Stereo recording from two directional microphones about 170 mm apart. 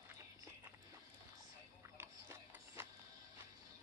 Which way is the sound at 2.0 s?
15° right (ahead or behind).